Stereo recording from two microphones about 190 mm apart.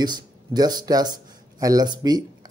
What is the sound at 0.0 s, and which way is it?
Speech, 20° right (ahead or behind).